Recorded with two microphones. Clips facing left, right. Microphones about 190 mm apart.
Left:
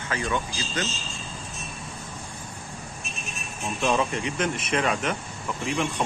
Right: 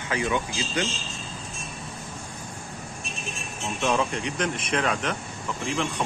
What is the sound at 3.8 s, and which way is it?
Speech, centre (ahead or behind).